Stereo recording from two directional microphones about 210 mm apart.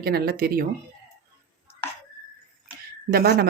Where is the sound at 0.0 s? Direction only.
45° right (ahead or behind).